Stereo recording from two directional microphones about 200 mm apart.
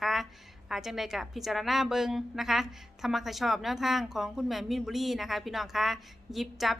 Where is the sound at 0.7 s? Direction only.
Centre (ahead or behind).